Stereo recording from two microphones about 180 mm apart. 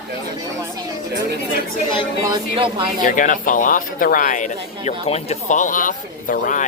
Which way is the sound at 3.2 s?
45° left (ahead or behind).